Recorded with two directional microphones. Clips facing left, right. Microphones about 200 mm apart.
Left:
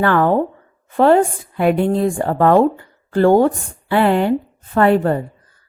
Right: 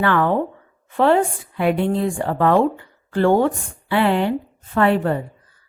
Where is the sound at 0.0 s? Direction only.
40° left (ahead or behind).